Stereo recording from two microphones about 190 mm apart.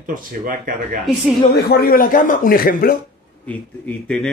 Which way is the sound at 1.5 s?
55° left (ahead or behind).